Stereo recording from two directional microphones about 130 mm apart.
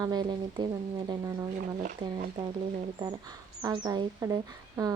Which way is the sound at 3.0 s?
30° right (ahead or behind).